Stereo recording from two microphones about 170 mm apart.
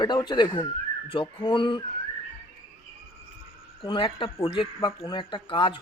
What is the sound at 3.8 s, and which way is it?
Speech, 30° left (ahead or behind).